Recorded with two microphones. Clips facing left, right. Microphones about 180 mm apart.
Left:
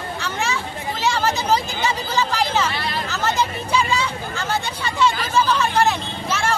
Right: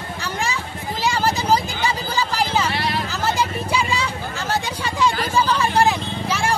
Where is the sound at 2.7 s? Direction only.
70° right (ahead or behind).